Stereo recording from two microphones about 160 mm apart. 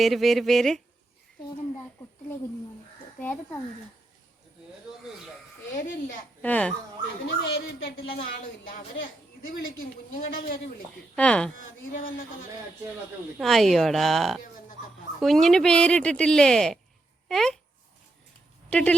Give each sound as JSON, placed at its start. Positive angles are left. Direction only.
{"t": 0.0, "sound": "speech", "side_deg": 0}
{"t": 3.2, "sound": "speech", "side_deg": 10}
{"t": 5.7, "sound": "a man's voice", "side_deg": 55}
{"t": 6.4, "sound": "speech", "side_deg": 10}
{"t": 7.4, "sound": "speech", "side_deg": 80}
{"t": 9.5, "sound": "a man's voice", "side_deg": 60}
{"t": 11.1, "sound": "speech", "side_deg": 5}
{"t": 13.4, "sound": "speech", "side_deg": 0}
{"t": 18.7, "sound": "speech", "side_deg": 5}